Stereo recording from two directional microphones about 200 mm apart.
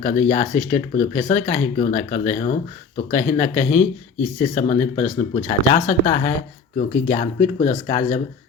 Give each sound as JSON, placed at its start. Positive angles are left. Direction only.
{"t": 0.0, "sound": "speech", "side_deg": 30}